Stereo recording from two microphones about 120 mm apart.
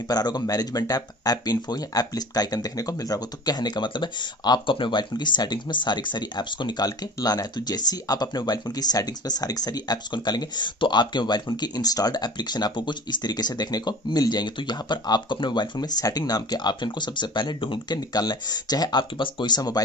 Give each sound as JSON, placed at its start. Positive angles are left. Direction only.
{"t": 0.1, "sound": "speech", "side_deg": 35}